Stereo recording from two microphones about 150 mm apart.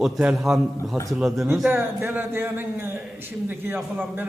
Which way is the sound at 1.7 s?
15° right (ahead or behind).